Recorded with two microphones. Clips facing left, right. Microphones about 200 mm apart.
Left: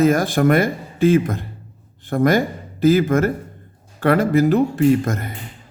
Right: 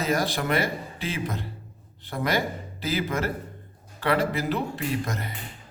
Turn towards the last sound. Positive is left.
turn(degrees=50)  # may be behind; listen again after turning